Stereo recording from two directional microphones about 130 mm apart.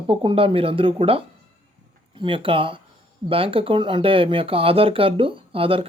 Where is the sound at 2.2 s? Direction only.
40° right (ahead or behind).